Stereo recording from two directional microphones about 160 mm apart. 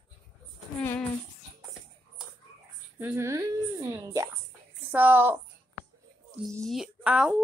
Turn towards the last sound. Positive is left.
turn(degrees=-5)  # may be behind; listen again after turning